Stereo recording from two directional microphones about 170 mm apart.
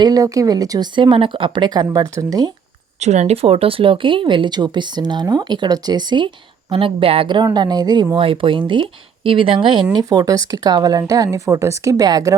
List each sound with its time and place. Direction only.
0.0 s speech: 20° right (ahead or behind)
3.0 s speech: 40° right (ahead or behind); by 12.4 s 20° right (ahead or behind)